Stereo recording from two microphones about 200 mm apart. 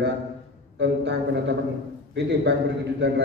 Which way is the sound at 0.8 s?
60° right (ahead or behind).